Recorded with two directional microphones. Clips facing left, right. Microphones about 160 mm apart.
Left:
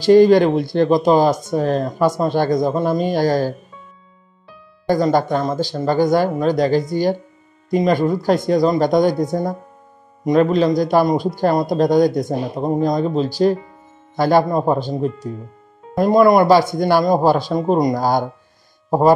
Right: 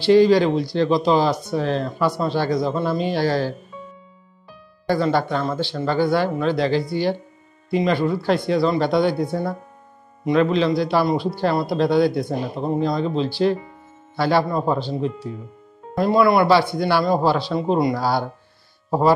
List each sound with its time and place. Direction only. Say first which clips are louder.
0.0 s speech: left 4 dB; 45° left (ahead or behind)
4.8 s speech: left 4 dB; 40° left (ahead or behind)